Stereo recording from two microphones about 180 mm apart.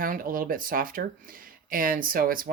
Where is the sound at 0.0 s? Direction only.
50° right (ahead or behind).